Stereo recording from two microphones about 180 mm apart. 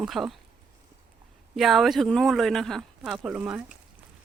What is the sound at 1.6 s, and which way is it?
Speech, centre (ahead or behind).